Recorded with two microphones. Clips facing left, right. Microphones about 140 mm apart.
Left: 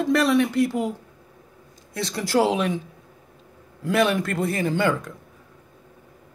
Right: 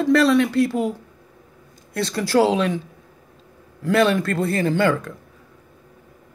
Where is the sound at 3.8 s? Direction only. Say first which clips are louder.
Right 3 dB; 15° left (ahead or behind).